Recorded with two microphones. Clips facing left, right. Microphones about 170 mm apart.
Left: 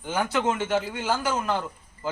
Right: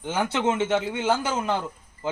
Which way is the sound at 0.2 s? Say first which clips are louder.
Right 1 dB; 25° right (ahead or behind).